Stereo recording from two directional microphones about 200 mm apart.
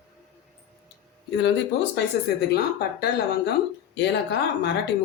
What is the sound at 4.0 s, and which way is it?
Speech, 60° left (ahead or behind).